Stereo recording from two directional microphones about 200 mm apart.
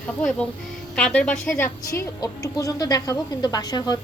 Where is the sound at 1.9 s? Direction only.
15° left (ahead or behind).